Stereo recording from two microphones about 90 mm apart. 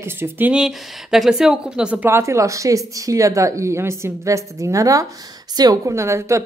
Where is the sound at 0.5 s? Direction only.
5° right (ahead or behind).